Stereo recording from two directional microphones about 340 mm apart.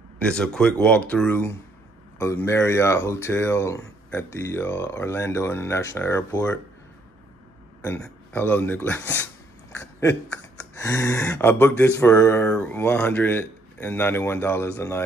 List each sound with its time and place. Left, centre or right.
0.2 s speech: centre
7.8 s a sound: centre
10.7 s speech: centre